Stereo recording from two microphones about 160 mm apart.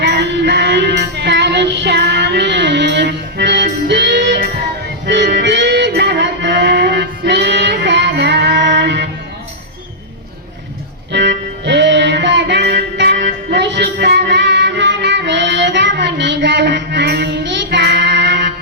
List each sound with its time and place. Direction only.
0.0 s music: 90° right
11.1 s music: 90° right